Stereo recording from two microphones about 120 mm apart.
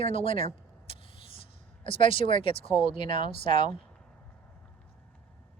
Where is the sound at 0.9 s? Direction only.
50° left (ahead or behind).